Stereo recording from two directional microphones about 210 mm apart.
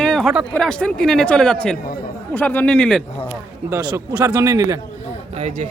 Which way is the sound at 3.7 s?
15° right (ahead or behind).